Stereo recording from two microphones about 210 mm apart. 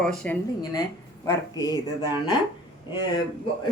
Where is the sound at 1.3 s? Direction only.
15° left (ahead or behind).